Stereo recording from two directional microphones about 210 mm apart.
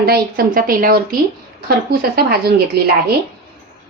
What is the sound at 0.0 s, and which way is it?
Speech, 45° right (ahead or behind).